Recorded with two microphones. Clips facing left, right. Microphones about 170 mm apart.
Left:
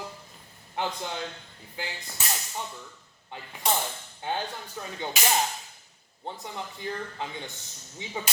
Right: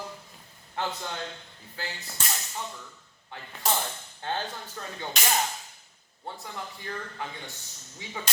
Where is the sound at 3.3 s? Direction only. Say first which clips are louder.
Left 1 dB; 20° left (ahead or behind).